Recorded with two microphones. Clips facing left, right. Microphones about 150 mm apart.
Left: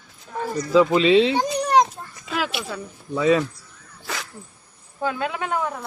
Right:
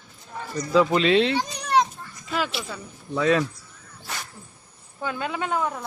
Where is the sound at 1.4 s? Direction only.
45° left (ahead or behind).